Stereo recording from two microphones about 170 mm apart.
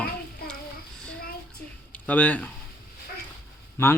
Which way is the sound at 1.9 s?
10° left (ahead or behind).